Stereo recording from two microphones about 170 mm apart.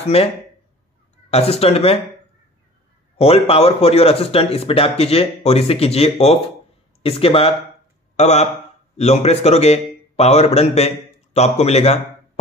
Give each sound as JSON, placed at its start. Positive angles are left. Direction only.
{"t": 0.0, "sound": "speech", "side_deg": 35}
{"t": 1.3, "sound": "speech", "side_deg": 35}
{"t": 3.2, "sound": "speech", "side_deg": 35}